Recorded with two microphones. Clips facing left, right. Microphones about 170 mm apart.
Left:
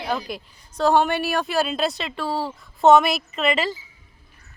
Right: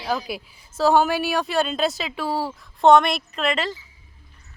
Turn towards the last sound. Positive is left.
turn(degrees=5)  # may be behind; listen again after turning